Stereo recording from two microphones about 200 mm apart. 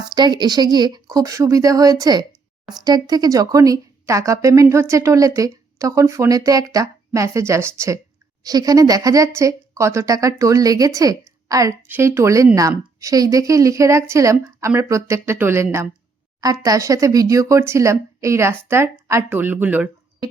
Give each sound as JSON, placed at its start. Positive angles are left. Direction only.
{"t": 0.1, "sound": "speech", "side_deg": -20}